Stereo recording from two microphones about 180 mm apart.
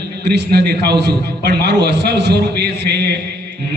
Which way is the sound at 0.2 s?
65° right (ahead or behind).